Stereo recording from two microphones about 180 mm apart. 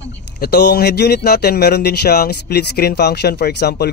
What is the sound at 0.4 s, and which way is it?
Speech, 65° left (ahead or behind).